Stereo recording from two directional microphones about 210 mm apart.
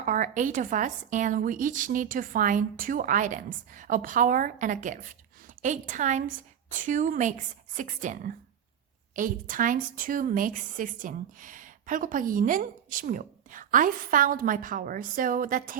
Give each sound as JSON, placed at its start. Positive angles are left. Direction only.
{"t": 0.0, "sound": "a woman's voice", "side_deg": -40}